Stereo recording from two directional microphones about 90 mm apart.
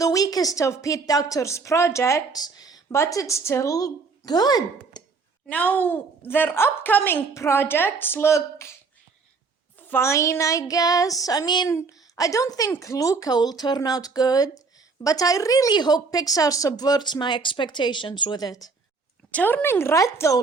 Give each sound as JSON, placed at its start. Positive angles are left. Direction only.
{"t": 0.0, "sound": "a woman's voice", "side_deg": 40}
{"t": 2.9, "sound": "a woman's voice", "side_deg": 35}
{"t": 5.5, "sound": "speech", "side_deg": 15}
{"t": 9.9, "sound": "a woman's voice", "side_deg": 30}
{"t": 11.7, "sound": "a woman's voice", "side_deg": 35}
{"t": 19.3, "sound": "speech", "side_deg": 15}